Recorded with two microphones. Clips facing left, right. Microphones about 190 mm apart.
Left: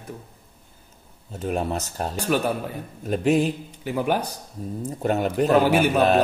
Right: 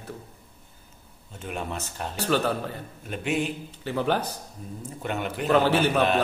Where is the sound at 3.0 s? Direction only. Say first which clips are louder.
Left 8 dB; 40° left (ahead or behind).